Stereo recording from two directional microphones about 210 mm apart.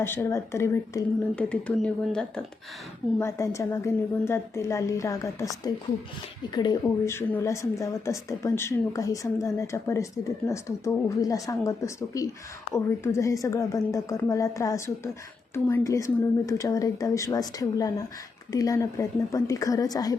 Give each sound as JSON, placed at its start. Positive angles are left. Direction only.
{"t": 0.0, "sound": "a woman's voice", "side_deg": 10}